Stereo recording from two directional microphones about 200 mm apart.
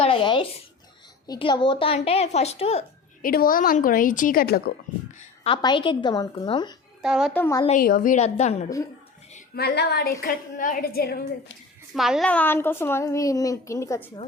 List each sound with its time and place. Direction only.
0.0 s a sound: 25° left (ahead or behind)
1.3 s a woman's voice: 25° left (ahead or behind)
3.2 s a woman's voice: 45° left (ahead or behind)
5.4 s a woman's voice: 25° left (ahead or behind)
7.0 s a child's voice: centre (ahead or behind)
7.3 s a woman's voice: 10° left (ahead or behind)
7.8 s a woman's voice: 45° left (ahead or behind)
9.6 s a woman's voice: 55° left (ahead or behind)
11.9 s a woman's voice: centre (ahead or behind); by 14.1 s 15° left (ahead or behind)